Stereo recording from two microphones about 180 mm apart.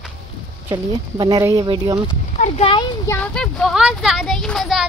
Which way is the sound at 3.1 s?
5° left (ahead or behind).